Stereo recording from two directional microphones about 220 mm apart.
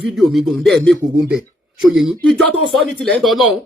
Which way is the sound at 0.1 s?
Centre (ahead or behind).